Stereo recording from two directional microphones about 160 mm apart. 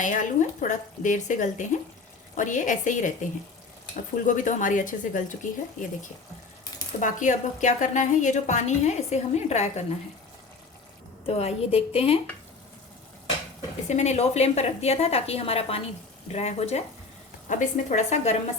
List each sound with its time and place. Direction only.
0.0 s a woman's voice: 50° left (ahead or behind)
4.3 s a woman's voice: 55° left (ahead or behind)
11.3 s a woman's voice: 40° left (ahead or behind)
13.8 s a woman's voice: 45° left (ahead or behind)